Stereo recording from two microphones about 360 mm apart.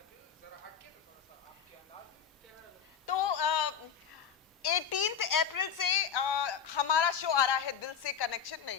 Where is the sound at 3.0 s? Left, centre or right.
Left.